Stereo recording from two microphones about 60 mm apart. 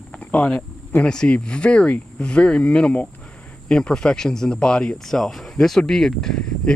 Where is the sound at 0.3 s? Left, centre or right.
Left.